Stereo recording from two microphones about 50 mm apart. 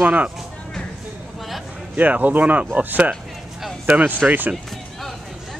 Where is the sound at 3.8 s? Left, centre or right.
Right.